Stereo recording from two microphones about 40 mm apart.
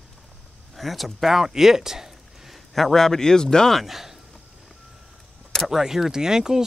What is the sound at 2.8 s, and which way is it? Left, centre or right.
Speech, centre.